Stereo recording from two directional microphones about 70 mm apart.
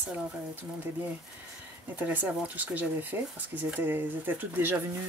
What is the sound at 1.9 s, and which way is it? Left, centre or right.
Speech, right.